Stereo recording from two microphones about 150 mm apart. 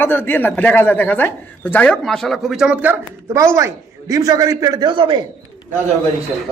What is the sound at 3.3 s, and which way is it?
A man's voice, 20° right (ahead or behind).